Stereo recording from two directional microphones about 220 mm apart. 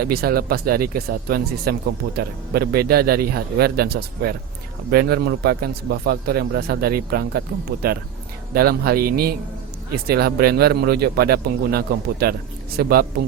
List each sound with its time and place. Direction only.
0.0 s speech: 45° right (ahead or behind)